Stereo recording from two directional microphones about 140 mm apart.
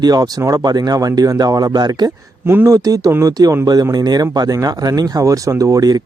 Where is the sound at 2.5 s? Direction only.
20° right (ahead or behind).